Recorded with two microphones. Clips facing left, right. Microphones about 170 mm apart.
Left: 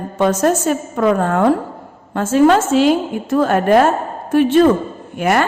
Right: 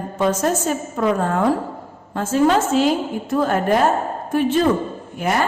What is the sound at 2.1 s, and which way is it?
A woman's voice, 75° left (ahead or behind).